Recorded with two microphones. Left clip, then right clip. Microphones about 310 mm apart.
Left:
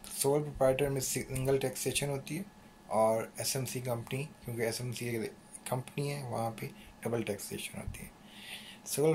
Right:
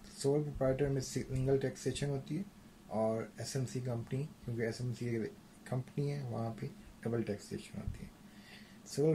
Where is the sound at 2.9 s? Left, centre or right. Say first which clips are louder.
Left 7 dB; left.